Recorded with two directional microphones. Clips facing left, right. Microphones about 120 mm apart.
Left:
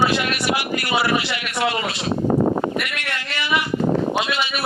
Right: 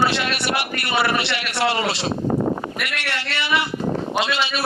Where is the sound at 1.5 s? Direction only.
30° right (ahead or behind).